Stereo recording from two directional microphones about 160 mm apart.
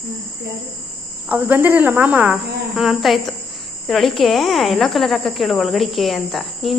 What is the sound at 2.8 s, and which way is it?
Speech, centre (ahead or behind).